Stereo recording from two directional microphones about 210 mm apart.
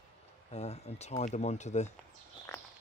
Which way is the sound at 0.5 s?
30° left (ahead or behind).